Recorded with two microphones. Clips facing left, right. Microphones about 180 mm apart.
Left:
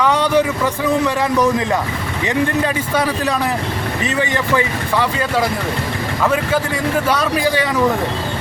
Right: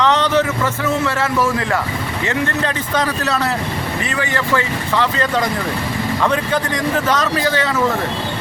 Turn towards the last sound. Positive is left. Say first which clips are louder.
# left 1 dB
turn(degrees=15)  # may be behind; listen again after turning